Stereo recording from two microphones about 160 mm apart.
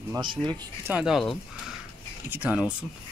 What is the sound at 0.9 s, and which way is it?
Speech, 5° right (ahead or behind).